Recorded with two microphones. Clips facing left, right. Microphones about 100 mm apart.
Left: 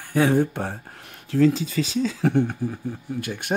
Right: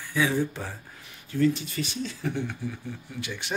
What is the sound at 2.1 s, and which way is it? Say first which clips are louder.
Speech: left 10 dB; 70° left (ahead or behind).